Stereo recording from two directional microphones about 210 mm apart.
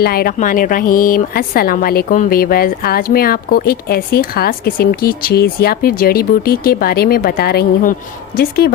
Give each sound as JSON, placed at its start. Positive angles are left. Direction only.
{"t": 0.0, "sound": "a woman's voice", "side_deg": 45}